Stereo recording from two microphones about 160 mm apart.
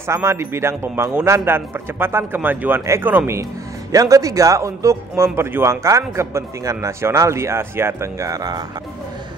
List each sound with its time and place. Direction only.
0.0 s a man's voice: 15° right (ahead or behind)